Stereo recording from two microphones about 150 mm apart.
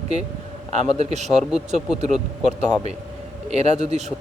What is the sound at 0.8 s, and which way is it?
Speech, 50° right (ahead or behind).